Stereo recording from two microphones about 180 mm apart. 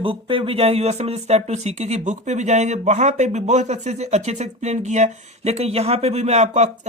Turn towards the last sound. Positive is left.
turn(degrees=-40)  # may be behind; listen again after turning